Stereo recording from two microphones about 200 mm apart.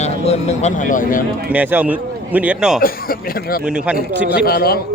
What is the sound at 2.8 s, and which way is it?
Speech, 45° left (ahead or behind).